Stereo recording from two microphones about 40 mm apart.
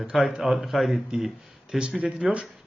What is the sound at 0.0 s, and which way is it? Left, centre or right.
Speech, centre.